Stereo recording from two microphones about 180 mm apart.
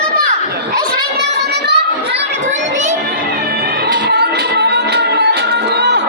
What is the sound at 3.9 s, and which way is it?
Music, 60° right (ahead or behind).